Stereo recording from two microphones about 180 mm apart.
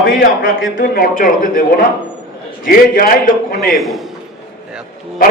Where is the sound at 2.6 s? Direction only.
55° left (ahead or behind).